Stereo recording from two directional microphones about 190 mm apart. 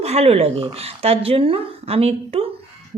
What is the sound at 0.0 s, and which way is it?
Speech, 30° right (ahead or behind).